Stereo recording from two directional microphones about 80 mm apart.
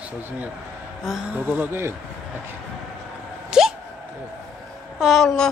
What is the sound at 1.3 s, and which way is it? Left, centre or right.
Speech, right.